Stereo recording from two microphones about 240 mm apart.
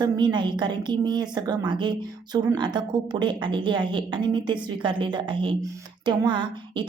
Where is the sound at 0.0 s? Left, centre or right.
Centre.